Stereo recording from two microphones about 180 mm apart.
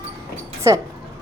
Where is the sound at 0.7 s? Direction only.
15° right (ahead or behind).